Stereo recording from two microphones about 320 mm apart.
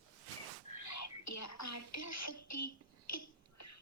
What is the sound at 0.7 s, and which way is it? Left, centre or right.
Whispering, left.